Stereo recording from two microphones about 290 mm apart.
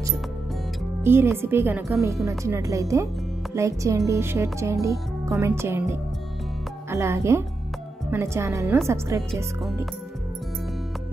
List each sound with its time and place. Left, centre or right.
1.0 s speech: centre